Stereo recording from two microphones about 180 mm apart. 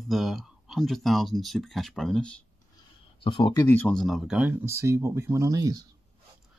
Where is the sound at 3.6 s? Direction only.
10° left (ahead or behind); by 5.9 s 20° right (ahead or behind).